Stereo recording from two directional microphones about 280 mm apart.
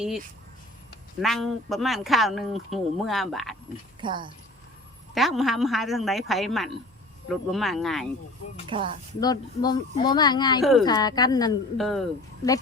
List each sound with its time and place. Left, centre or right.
1.2 s a woman's voice: centre
4.0 s speech: centre
5.1 s a woman's voice: centre
8.6 s speech: centre
9.2 s speech: centre
10.6 s a woman's voice: centre
10.8 s speech: centre
11.8 s a woman's voice: centre
12.4 s speech: centre